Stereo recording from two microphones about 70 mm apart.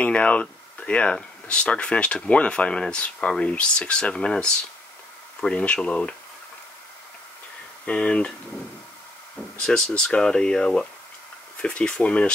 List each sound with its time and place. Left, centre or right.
0.0 s speech: centre
7.8 s speech: centre
9.6 s speech: centre